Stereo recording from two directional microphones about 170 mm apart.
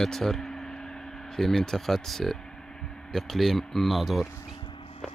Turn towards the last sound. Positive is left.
turn(degrees=0)  # may be behind; listen again after turning